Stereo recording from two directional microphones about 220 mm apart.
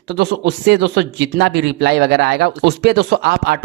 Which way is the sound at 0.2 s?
50° right (ahead or behind).